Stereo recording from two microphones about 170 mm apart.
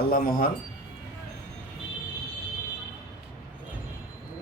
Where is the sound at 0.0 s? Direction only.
60° left (ahead or behind).